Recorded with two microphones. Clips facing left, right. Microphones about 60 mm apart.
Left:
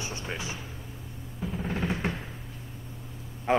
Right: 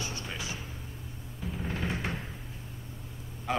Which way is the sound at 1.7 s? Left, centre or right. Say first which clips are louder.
Left 4 dB; left.